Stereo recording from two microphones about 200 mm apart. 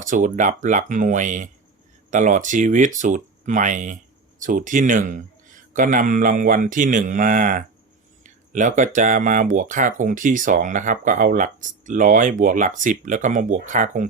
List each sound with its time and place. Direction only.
0.0 s speech: 40° right (ahead or behind)